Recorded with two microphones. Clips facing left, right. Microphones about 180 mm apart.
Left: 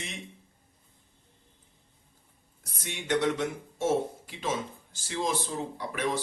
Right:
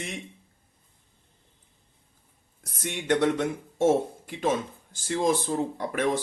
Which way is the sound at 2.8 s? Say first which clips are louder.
Right 4 dB; 55° right (ahead or behind).